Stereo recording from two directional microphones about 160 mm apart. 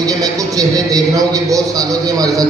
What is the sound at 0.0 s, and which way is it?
A man's voice, 25° right (ahead or behind).